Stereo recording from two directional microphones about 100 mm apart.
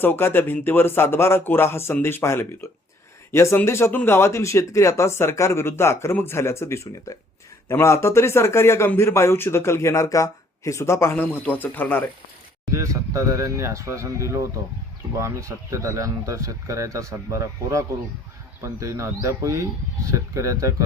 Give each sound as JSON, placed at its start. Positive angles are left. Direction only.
{"t": 0.0, "sound": "a man's voice", "side_deg": 20}
{"t": 12.7, "sound": "speech", "side_deg": -30}